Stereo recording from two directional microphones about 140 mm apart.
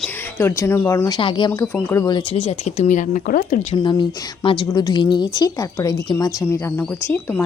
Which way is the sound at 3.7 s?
35° left (ahead or behind).